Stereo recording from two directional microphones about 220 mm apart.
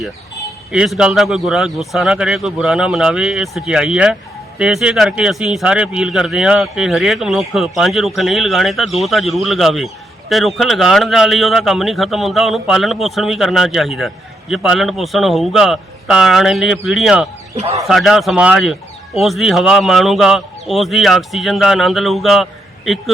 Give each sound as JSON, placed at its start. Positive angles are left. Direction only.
{"t": 0.7, "sound": "a man's voice", "side_deg": -5}